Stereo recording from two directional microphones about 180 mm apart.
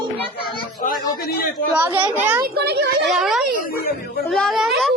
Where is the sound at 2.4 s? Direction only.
65° right (ahead or behind).